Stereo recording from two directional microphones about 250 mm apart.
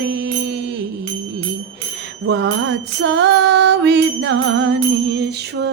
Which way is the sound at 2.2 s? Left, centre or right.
Right.